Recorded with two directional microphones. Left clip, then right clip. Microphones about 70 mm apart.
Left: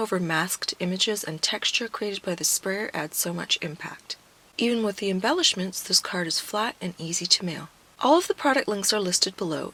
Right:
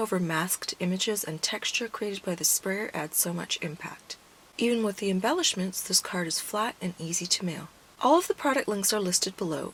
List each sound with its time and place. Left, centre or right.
0.0 s speech: left